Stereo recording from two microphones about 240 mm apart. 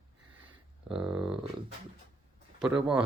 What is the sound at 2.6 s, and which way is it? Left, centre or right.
Speech, centre.